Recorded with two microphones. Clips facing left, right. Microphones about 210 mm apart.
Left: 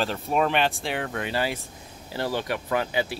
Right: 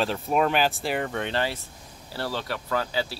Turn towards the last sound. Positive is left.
turn(degrees=15)  # may be behind; listen again after turning